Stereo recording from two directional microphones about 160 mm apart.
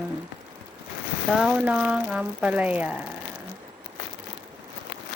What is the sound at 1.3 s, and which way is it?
Speech, 5° right (ahead or behind).